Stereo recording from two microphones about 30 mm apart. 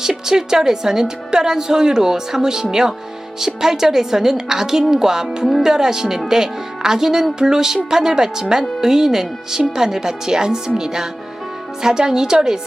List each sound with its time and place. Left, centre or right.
0.0 s a woman's voice: right